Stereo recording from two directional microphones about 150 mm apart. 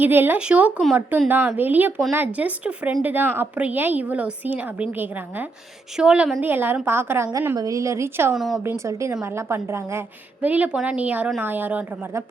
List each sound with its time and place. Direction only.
0.0 s a woman's voice: 15° right (ahead or behind)
8.4 s speech: centre (ahead or behind)
8.6 s a woman's voice: 20° right (ahead or behind)